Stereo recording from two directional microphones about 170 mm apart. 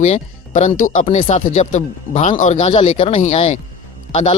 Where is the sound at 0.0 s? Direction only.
45° left (ahead or behind).